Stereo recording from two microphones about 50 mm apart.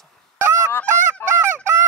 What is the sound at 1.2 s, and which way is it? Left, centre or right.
Honk, left.